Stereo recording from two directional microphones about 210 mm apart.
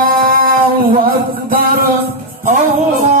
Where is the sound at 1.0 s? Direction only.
45° right (ahead or behind).